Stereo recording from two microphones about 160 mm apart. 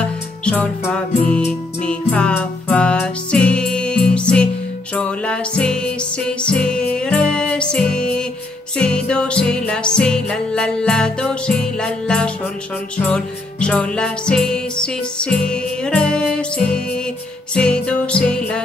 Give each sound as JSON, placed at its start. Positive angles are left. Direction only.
{"t": 0.5, "sound": "music", "side_deg": 10}